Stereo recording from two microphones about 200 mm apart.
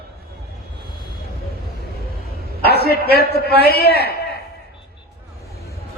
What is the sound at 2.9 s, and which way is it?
Speech, 50° left (ahead or behind).